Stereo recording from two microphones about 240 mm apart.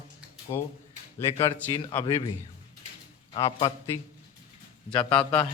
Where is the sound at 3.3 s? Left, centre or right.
Left.